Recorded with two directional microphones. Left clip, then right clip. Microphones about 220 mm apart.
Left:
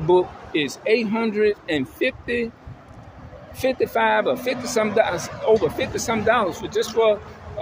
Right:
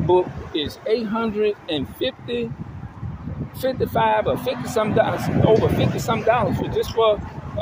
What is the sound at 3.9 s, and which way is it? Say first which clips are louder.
Speech: right 2 dB; 5° left (ahead or behind).